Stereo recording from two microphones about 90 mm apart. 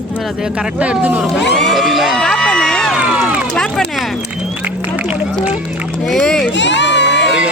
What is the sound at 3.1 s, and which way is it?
Run, 15° right (ahead or behind).